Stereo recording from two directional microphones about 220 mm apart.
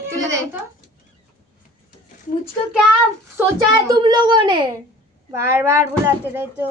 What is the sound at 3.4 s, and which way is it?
A child's voice, 20° right (ahead or behind).